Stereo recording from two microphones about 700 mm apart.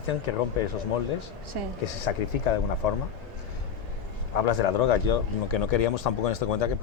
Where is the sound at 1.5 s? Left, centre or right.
Right.